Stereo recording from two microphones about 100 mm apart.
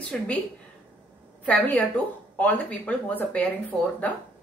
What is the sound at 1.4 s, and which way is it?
A woman's voice, 15° left (ahead or behind).